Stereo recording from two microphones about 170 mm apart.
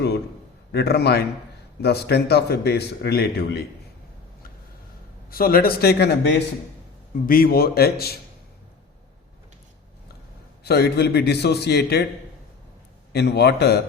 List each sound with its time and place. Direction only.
0.7 s a man's voice: 70° left (ahead or behind)
5.3 s speech: 60° left (ahead or behind)
7.3 s speech: 60° left (ahead or behind)
10.6 s a man's voice: 75° left (ahead or behind)
13.1 s a man's voice: 75° left (ahead or behind)